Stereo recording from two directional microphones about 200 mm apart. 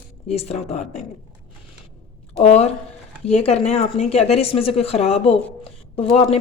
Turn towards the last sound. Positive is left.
turn(degrees=30)  # may be behind; listen again after turning